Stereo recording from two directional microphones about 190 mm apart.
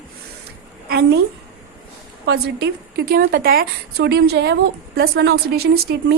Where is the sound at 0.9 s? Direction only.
60° right (ahead or behind).